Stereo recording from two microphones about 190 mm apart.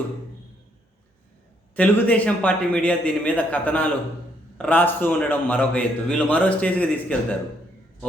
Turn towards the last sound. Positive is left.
turn(degrees=5)  # may be behind; listen again after turning